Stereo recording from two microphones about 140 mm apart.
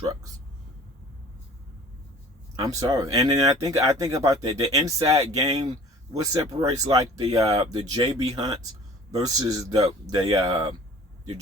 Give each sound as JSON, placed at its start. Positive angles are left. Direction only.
{"t": 2.6, "sound": "speech", "side_deg": -25}